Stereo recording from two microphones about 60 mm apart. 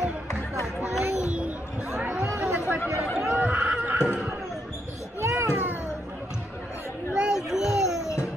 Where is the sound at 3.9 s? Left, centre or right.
Centre.